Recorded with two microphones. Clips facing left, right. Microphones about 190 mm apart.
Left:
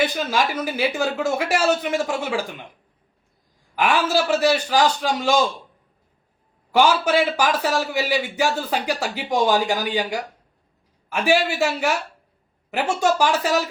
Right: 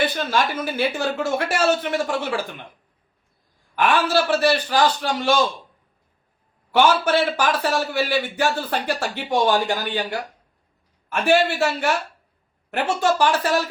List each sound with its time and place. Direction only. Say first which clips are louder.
0.0 s a man's voice: even; 5° left (ahead or behind)
3.8 s a man's voice: right 1 dB; 10° left (ahead or behind)
6.7 s a man's voice: even; 10° left (ahead or behind)
13.0 s a man's voice: even; 15° left (ahead or behind)